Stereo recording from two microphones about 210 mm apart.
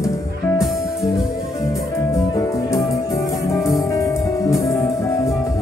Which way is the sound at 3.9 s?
15° left (ahead or behind).